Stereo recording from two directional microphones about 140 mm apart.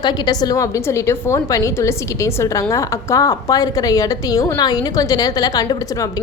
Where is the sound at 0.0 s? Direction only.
30° left (ahead or behind).